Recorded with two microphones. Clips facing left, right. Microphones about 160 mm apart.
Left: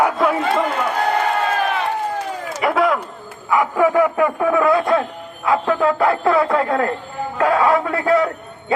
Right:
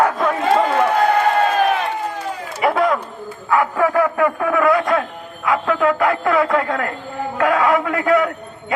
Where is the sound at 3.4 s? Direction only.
15° left (ahead or behind).